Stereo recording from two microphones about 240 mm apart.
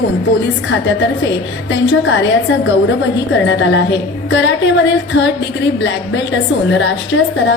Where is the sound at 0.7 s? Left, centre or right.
Left.